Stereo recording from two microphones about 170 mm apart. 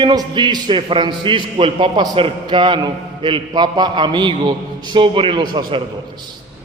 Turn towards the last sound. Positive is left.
turn(degrees=-30)  # may be behind; listen again after turning